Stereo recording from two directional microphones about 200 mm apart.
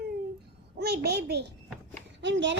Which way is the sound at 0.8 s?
55° right (ahead or behind).